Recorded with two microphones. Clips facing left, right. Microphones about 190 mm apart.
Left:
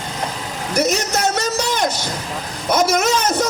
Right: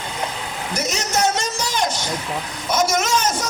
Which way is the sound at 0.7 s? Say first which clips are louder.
Left 5 dB; 65° left (ahead or behind).